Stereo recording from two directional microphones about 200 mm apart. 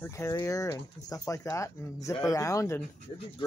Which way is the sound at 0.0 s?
15° left (ahead or behind).